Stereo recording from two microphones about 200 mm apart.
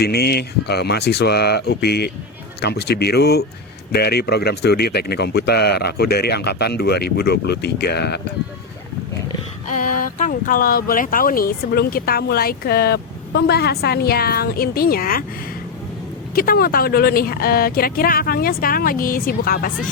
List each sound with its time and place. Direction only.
0.0 s speech: 50° left (ahead or behind)
9.6 s speech: 40° left (ahead or behind)
16.3 s speech: 45° left (ahead or behind)